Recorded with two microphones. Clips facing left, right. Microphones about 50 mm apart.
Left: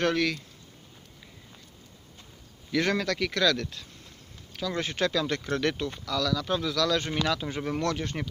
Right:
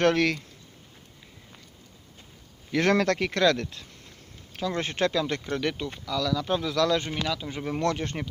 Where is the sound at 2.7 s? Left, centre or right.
Right.